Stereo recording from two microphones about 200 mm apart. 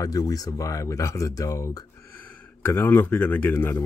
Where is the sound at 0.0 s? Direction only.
20° left (ahead or behind).